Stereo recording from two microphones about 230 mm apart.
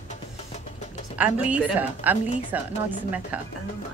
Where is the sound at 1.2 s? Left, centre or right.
Centre.